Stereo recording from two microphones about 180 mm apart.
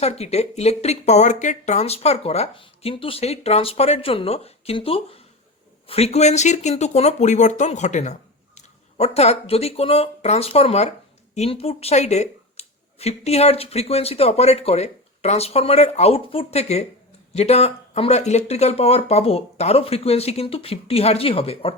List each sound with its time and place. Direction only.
0.0 s speech: 35° left (ahead or behind)